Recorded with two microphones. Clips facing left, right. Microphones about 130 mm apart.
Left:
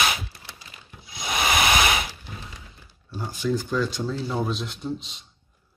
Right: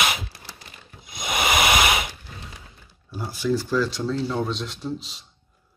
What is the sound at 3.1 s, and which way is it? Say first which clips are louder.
Speech: right 2 dB; 10° right (ahead or behind).